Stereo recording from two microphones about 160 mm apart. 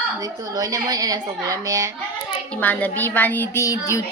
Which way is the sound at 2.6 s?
10° left (ahead or behind).